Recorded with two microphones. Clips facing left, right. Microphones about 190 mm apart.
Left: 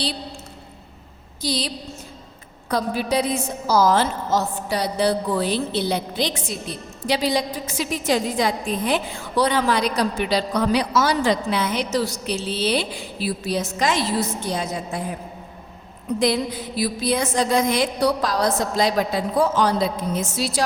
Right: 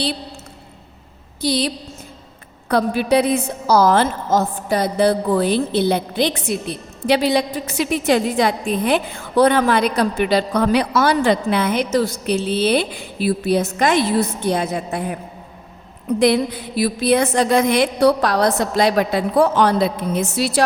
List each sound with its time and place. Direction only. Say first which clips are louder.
1.4 s a woman's voice: right 6 dB; 60° right (ahead or behind)
16.1 s a woman's voice: right 5 dB; 60° right (ahead or behind)